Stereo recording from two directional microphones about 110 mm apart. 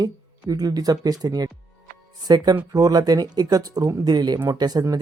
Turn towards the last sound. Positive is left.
turn(degrees=-35)  # may be behind; listen again after turning